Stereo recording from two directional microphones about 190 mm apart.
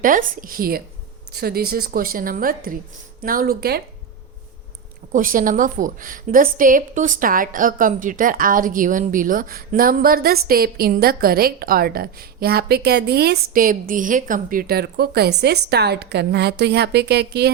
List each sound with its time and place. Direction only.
0.0 s a woman's voice: 45° right (ahead or behind)
5.1 s a woman's voice: 45° right (ahead or behind)